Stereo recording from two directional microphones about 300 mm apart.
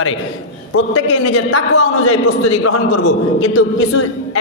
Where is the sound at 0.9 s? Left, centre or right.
Left.